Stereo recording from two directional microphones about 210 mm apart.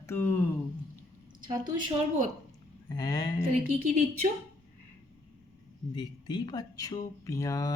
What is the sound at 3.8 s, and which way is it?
Speech, 40° right (ahead or behind).